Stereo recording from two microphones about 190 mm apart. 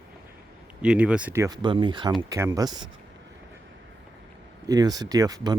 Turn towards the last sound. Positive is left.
turn(degrees=-20)  # may be behind; listen again after turning